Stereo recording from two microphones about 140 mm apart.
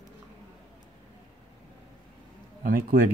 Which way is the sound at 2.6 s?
85° right.